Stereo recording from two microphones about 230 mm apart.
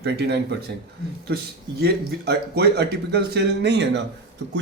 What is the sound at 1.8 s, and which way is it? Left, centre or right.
Speech, right.